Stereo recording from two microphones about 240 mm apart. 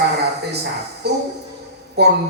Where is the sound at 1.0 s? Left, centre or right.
Right.